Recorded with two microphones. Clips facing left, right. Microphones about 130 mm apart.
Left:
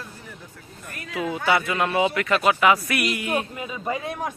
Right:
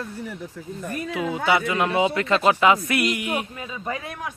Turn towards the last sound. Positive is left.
turn(degrees=15)  # may be behind; listen again after turning